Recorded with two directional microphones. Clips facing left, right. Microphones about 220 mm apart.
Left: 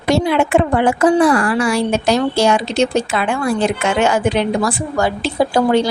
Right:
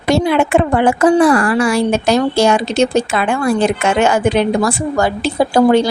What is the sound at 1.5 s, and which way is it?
Speech, 55° right (ahead or behind).